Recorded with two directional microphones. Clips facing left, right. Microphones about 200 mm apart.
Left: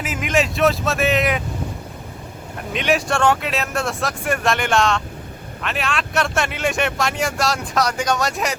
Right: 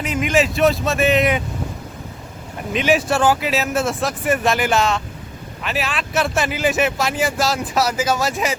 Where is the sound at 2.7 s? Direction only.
Centre (ahead or behind).